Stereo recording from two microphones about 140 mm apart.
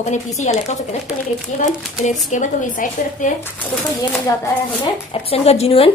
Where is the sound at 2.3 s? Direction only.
65° left (ahead or behind).